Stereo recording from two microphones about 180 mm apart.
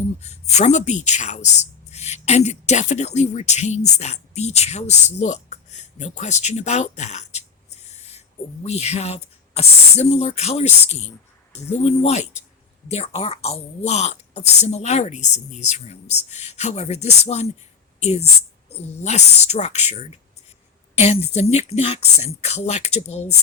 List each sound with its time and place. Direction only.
0.2 s speech: 35° left (ahead or behind)
8.6 s speech: 35° left (ahead or behind)
18.7 s speech: 40° left (ahead or behind)